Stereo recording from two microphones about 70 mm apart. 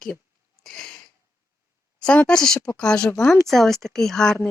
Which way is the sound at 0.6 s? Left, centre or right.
Centre.